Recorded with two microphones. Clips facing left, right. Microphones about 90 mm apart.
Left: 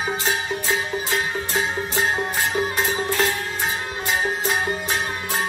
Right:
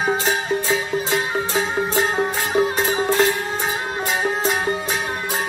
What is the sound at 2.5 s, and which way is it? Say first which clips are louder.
Music: right 7 dB; 35° right (ahead or behind).